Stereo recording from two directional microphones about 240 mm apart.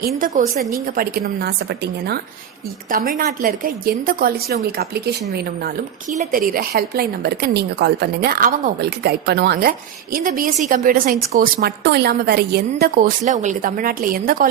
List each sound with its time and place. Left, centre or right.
0.2 s speech: right